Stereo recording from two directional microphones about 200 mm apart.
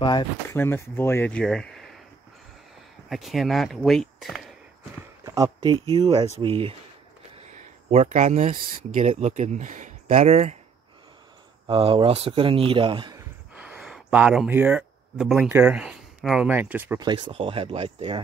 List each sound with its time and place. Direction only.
0.0 s speech: 20° left (ahead or behind)
0.5 s speech: 10° left (ahead or behind)
3.1 s speech: centre (ahead or behind)
5.2 s speech: 15° right (ahead or behind); by 10.6 s 35° right (ahead or behind)
11.6 s speech: 25° right (ahead or behind)
13.6 s speech: 5° right (ahead or behind)
17.0 s speech: 25° right (ahead or behind)